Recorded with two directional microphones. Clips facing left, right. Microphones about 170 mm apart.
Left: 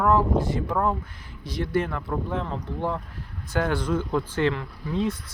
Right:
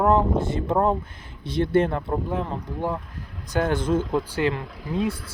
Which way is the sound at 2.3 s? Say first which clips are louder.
Right 2 dB; 15° right (ahead or behind).